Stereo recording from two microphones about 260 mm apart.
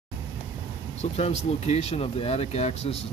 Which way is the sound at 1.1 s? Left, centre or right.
Left.